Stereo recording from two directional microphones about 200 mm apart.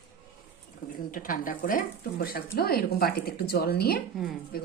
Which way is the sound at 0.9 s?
45° left (ahead or behind).